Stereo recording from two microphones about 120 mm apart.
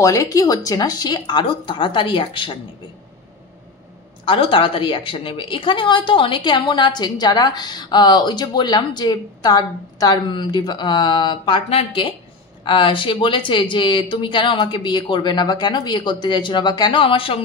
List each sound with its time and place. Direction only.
0.0 s speech: 30° left (ahead or behind); by 2.5 s 45° left (ahead or behind)
4.2 s a woman's voice: 45° left (ahead or behind)